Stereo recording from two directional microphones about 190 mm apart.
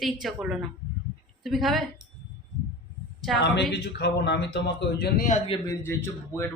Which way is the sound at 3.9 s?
65° left (ahead or behind).